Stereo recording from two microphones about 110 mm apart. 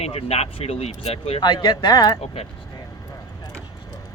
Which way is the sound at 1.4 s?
45° left (ahead or behind).